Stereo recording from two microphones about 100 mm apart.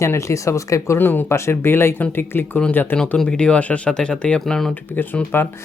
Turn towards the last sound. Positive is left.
turn(degrees=20)  # may be behind; listen again after turning